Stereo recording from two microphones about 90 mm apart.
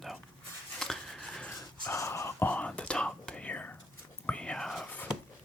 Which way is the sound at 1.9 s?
35° left (ahead or behind).